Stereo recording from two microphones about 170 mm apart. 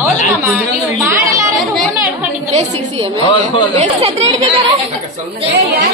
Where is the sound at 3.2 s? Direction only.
25° left (ahead or behind).